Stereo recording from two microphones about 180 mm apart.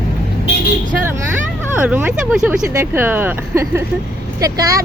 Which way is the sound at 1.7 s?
10° right (ahead or behind).